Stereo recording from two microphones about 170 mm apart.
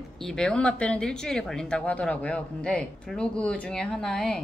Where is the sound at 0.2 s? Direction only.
5° left (ahead or behind).